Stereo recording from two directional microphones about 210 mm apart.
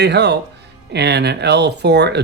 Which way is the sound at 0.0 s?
55° right (ahead or behind).